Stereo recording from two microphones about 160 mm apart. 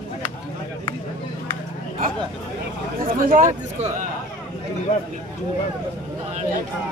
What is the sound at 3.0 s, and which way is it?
A man's voice, 55° right (ahead or behind).